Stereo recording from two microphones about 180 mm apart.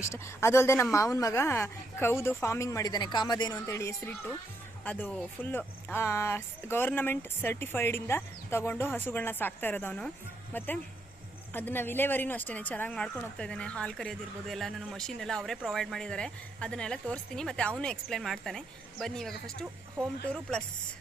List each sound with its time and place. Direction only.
0.0 s a woman's voice: 15° left (ahead or behind)